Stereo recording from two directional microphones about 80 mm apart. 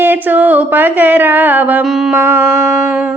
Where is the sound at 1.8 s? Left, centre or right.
Centre.